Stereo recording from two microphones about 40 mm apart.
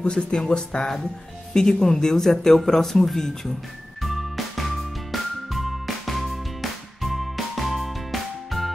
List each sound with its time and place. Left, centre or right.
0.0 s speech: centre
4.0 s music: centre